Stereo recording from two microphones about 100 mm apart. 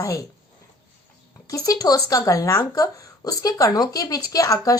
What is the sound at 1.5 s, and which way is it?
Speech, 35° left (ahead or behind).